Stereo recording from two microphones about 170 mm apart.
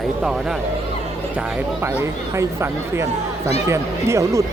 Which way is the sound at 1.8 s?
15° right (ahead or behind).